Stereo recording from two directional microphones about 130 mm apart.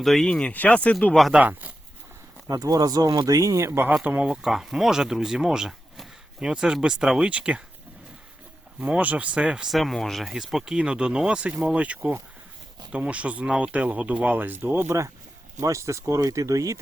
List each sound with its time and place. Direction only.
0.0 s speech: centre (ahead or behind)
1.4 s speech: 15° right (ahead or behind)
2.5 s speech: 30° right (ahead or behind); by 7.6 s 10° right (ahead or behind)
8.8 s speech: 10° right (ahead or behind)